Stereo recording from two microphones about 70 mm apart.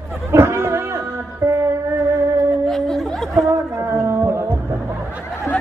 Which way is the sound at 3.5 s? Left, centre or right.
Right.